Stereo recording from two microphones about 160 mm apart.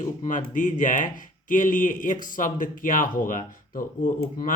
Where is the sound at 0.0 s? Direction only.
55° left (ahead or behind).